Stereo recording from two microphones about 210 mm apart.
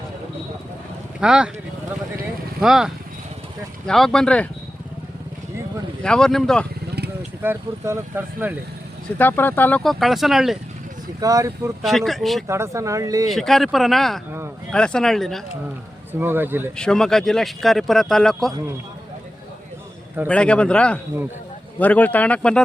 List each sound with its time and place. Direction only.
1.2 s speech: 5° right (ahead or behind)
2.6 s speech: centre (ahead or behind)
6.0 s speech: 5° left (ahead or behind)
7.4 s speech: 10° right (ahead or behind)
9.1 s speech: 10° left (ahead or behind)
11.2 s speech: 15° right (ahead or behind)
11.8 s speech: centre (ahead or behind)
12.5 s speech: 15° right (ahead or behind)
13.3 s speech: centre (ahead or behind)
16.1 s speech: 10° right (ahead or behind)
16.7 s speech: 5° left (ahead or behind)
20.2 s speech: 5° left (ahead or behind)